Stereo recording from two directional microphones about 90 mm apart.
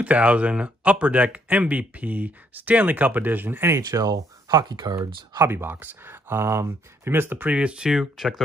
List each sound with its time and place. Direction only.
0.0 s speech: 15° right (ahead or behind); by 5.4 s 50° right (ahead or behind)
5.4 s speech: 25° right (ahead or behind); by 8.4 s 5° right (ahead or behind)